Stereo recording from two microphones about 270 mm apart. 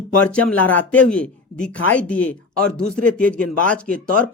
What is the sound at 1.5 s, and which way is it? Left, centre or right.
Speech, centre.